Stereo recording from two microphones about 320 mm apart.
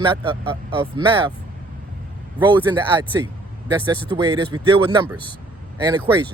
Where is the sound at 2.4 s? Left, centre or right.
Centre.